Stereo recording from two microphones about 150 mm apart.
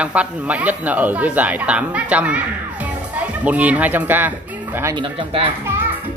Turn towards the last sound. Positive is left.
turn(degrees=-35)  # may be behind; listen again after turning